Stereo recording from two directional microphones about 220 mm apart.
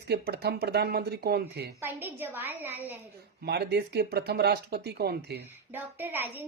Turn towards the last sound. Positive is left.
turn(degrees=-10)  # may be behind; listen again after turning